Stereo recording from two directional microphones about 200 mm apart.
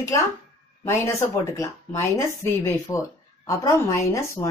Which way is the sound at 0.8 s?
15° left (ahead or behind).